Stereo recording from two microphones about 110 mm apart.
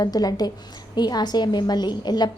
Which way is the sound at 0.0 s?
35° left (ahead or behind).